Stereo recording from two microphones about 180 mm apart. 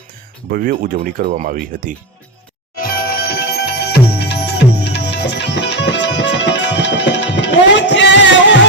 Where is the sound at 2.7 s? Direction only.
55° left (ahead or behind); by 8.0 s 80° left.